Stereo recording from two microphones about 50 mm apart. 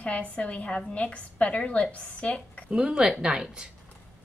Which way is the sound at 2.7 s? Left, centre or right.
Centre.